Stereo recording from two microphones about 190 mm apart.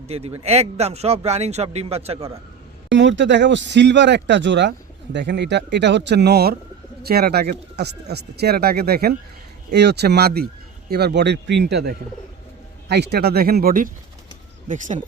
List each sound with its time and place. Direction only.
0.1 s speech: 30° right (ahead or behind)
2.9 s speech: 70° right (ahead or behind); by 15.0 s 40° right (ahead or behind)